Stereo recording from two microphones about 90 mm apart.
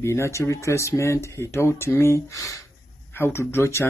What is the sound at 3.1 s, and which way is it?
Speech, 25° left (ahead or behind).